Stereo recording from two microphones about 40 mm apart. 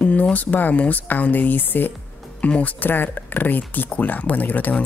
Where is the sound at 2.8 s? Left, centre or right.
Left.